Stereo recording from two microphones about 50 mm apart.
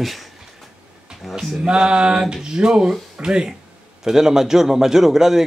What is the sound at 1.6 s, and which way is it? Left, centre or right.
A man's voice, centre.